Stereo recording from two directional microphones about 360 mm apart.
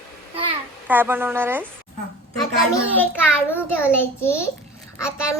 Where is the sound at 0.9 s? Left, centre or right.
Centre.